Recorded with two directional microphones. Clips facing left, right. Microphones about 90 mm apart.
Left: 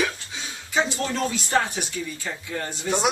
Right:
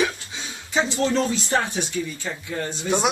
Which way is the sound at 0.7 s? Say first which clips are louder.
Right 3 dB; 25° right (ahead or behind).